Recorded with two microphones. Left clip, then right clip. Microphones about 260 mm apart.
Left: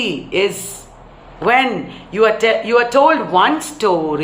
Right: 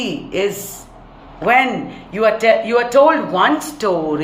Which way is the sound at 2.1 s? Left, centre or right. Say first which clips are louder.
Even; centre.